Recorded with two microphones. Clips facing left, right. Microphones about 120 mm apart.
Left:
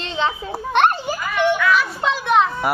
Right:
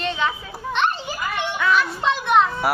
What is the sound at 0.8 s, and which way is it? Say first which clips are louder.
Children playing: left 6 dB; 55° left (ahead or behind).